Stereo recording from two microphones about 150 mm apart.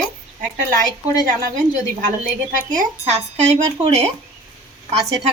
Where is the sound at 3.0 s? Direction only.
45° right (ahead or behind).